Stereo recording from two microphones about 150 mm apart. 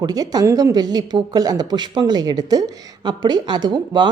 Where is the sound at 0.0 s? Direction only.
25° right (ahead or behind).